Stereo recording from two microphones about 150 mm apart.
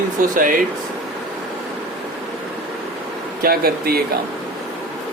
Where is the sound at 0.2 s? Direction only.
65° right (ahead or behind).